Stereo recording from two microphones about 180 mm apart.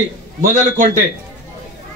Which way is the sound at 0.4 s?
45° right (ahead or behind).